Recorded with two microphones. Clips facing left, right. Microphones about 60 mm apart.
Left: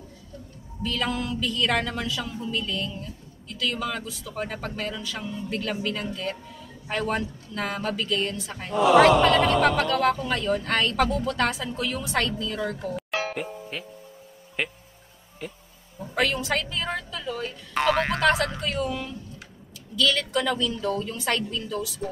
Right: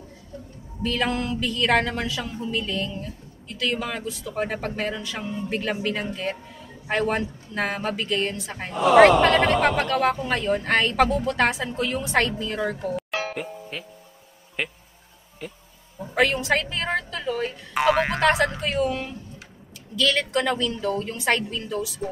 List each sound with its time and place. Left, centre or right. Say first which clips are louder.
0.8 s a woman's voice: right 3 dB; right
2.0 s speech: right 1 dB; centre
2.5 s a man's voice: right 3 dB; right
8.7 s a man's voice: right 2 dB; centre; by 12.7 s right
12.9 s music: right 1 dB; centre
14.6 s a woman's voice: even; centre
16.3 s a man's voice: right 4 dB; centre
16.7 s a woman's voice: right 4 dB; right
17.7 s speech: right 2 dB; centre
18.6 s a man's voice: right 4 dB; right